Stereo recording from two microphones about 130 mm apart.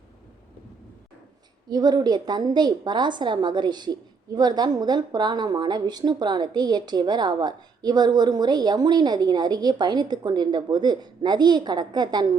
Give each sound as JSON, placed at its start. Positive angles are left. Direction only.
{"t": 1.7, "sound": "a woman's voice", "side_deg": -30}